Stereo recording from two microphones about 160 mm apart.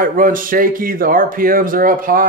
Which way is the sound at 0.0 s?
60° right (ahead or behind).